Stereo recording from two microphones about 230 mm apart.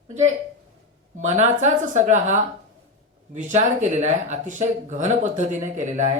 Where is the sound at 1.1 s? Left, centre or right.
Right.